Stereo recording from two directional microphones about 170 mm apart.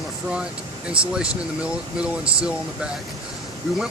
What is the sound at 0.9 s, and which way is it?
Speech, 5° right (ahead or behind).